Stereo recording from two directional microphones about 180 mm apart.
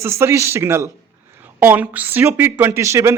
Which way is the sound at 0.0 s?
15° right (ahead or behind).